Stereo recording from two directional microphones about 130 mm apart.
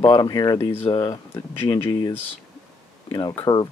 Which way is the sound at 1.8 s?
25° left (ahead or behind).